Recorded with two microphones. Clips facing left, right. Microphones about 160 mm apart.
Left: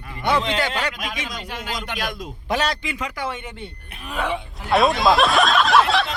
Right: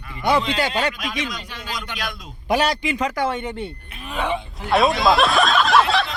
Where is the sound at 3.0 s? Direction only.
45° right (ahead or behind).